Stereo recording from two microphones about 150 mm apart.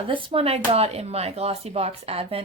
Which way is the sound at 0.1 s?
35° right (ahead or behind).